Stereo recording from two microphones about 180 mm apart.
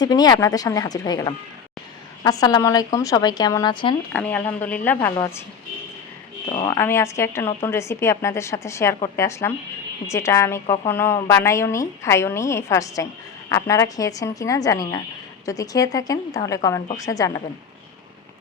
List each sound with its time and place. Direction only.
0.0 s speech: 20° left (ahead or behind)
4.1 s a woman's voice: 10° left (ahead or behind)
6.5 s speech: 25° left (ahead or behind)
6.7 s a woman's voice: 15° left (ahead or behind)